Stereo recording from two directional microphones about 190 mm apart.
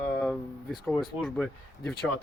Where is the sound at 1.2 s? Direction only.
5° left (ahead or behind).